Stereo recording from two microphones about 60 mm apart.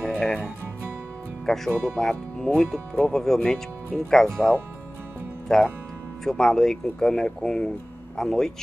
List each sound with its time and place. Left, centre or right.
0.0 s music: centre
1.4 s speech: centre
5.5 s speech: centre